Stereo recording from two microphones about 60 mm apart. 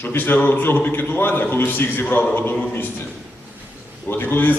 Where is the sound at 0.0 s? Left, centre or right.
Left.